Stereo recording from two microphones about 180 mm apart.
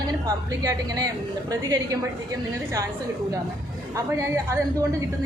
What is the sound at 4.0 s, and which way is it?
Speech, 15° right (ahead or behind).